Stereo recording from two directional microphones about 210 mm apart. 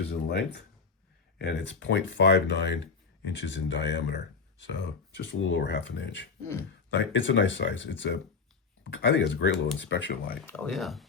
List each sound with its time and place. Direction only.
0.1 s speech: 55° left (ahead or behind)
10.4 s speech: 5° left (ahead or behind)